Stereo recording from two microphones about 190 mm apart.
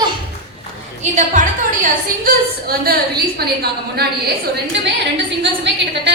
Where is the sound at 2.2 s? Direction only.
55° right (ahead or behind).